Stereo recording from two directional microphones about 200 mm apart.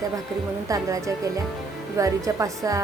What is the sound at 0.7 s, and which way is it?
A woman's voice, 15° right (ahead or behind).